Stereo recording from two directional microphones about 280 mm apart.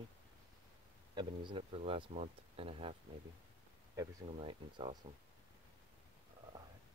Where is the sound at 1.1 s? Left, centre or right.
Centre.